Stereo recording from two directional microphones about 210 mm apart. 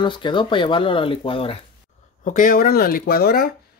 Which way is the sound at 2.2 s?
40° left (ahead or behind).